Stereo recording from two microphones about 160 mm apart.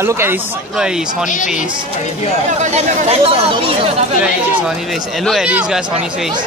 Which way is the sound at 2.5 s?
45° right (ahead or behind).